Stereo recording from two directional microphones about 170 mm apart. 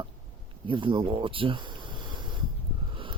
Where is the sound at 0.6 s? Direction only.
30° right (ahead or behind).